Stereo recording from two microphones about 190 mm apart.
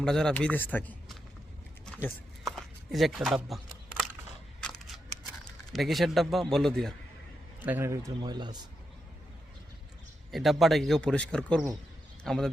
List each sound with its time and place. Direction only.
0.0 s speech: 5° left (ahead or behind)
5.7 s speech: centre (ahead or behind)
7.6 s a man's voice: 10° right (ahead or behind)
10.3 s speech: centre (ahead or behind)